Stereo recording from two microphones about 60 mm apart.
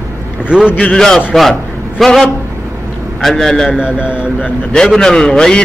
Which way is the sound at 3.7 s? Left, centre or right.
Centre.